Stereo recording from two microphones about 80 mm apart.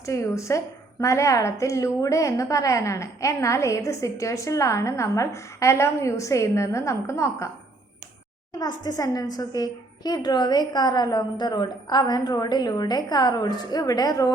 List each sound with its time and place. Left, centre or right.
0.0 s a woman's voice: left
8.5 s a woman's voice: left